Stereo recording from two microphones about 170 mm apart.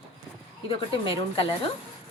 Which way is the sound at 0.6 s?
35° left (ahead or behind).